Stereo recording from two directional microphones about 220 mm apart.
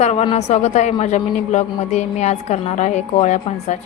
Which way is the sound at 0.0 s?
30° left (ahead or behind).